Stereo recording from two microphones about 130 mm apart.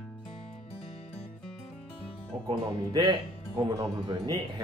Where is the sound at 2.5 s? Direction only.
35° right (ahead or behind).